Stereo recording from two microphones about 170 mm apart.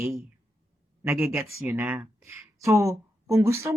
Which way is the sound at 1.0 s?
15° right (ahead or behind).